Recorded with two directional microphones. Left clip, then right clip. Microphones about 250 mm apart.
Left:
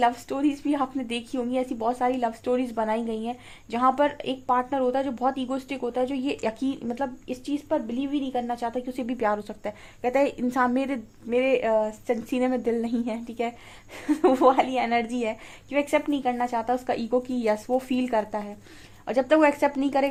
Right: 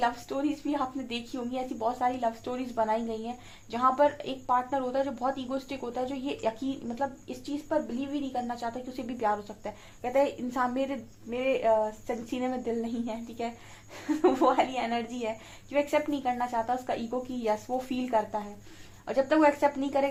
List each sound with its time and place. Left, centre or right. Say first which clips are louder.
0.0 s a woman's voice: left 6 dB; left